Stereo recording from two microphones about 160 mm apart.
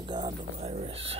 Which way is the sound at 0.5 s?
40° right (ahead or behind).